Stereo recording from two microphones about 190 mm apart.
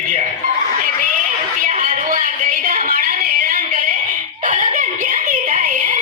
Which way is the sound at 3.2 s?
50° right (ahead or behind).